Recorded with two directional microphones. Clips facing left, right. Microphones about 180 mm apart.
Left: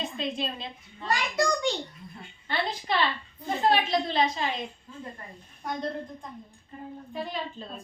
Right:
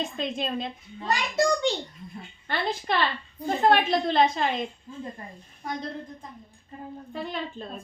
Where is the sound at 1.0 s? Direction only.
25° right (ahead or behind).